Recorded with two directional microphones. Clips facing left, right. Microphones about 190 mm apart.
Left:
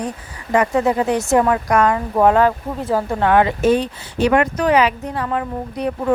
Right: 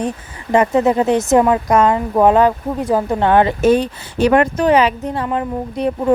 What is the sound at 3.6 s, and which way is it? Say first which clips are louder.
Speech: right 3 dB; 40° right (ahead or behind).